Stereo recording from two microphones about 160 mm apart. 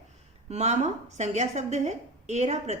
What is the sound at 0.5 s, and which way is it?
A woman's voice, 45° right (ahead or behind).